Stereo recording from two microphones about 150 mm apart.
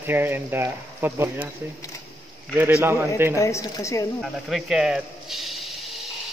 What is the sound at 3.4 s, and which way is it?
Speech, 20° left (ahead or behind).